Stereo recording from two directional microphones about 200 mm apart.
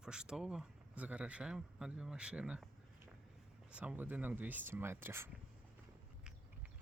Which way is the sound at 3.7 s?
5° right (ahead or behind).